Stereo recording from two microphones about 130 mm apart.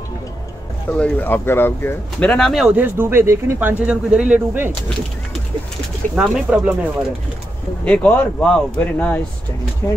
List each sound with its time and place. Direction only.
0.8 s speech: 10° left (ahead or behind)
2.1 s speech: 5° left (ahead or behind); by 4.7 s 15° right (ahead or behind)
6.1 s speech: 5° right (ahead or behind)
7.8 s speech: 10° left (ahead or behind)